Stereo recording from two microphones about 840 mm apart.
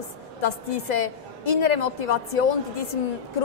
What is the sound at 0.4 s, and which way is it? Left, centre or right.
A woman's voice, left.